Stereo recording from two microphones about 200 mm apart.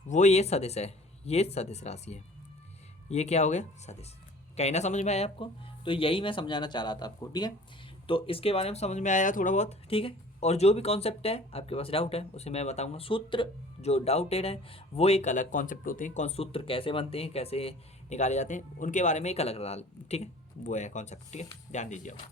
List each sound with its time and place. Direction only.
0.1 s speech: 35° left (ahead or behind)